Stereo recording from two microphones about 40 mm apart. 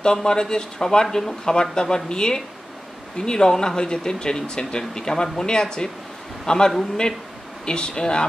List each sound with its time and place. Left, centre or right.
0.0 s a man's voice: centre